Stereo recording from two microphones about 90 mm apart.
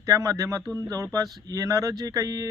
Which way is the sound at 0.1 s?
35° right (ahead or behind).